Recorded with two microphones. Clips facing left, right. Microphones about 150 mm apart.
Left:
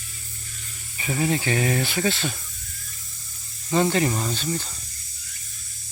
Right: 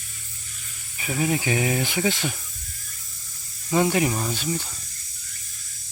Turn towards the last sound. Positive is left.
turn(degrees=-10)  # may be behind; listen again after turning